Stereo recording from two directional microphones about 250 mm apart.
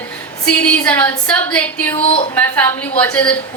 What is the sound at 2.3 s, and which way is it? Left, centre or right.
A woman's voice, centre.